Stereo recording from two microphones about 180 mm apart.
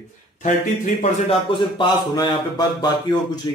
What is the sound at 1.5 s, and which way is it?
Speech, 25° left (ahead or behind).